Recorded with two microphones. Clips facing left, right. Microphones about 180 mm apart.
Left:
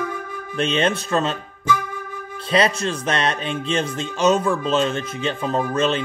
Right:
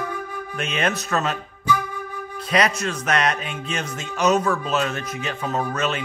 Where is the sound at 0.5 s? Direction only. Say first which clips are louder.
Left 5 dB; 30° left (ahead or behind).